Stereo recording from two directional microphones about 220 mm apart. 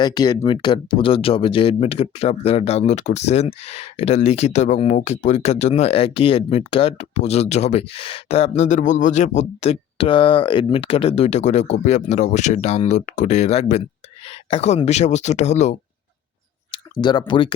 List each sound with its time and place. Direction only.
0.0 s speech: 20° left (ahead or behind)
16.7 s speech: 20° left (ahead or behind)